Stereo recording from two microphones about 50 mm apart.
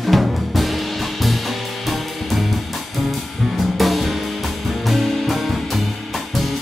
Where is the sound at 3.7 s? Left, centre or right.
Centre.